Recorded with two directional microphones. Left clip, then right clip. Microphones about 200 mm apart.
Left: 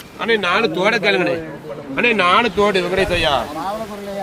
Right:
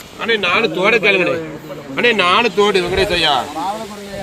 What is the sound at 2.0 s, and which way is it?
A man's voice, 10° right (ahead or behind).